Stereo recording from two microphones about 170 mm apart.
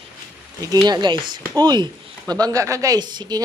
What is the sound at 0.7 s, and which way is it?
Speech, 25° right (ahead or behind).